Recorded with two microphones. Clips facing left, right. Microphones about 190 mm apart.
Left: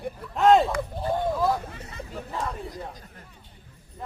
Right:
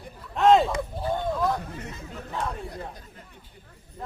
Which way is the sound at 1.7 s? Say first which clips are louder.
Right 4 dB; 70° right (ahead or behind).